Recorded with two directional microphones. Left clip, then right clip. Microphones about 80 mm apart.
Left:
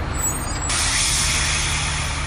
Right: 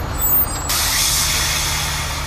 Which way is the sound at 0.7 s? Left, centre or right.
Right.